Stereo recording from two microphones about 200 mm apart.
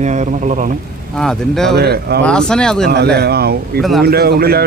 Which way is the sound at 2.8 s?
55° right (ahead or behind).